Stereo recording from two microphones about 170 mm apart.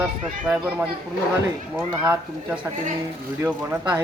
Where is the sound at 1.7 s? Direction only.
5° right (ahead or behind).